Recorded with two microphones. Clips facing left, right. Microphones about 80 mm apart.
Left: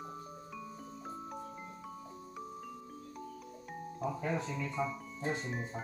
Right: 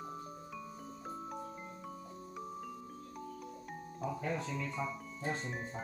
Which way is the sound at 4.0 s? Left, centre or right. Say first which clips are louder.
Left 2 dB; centre.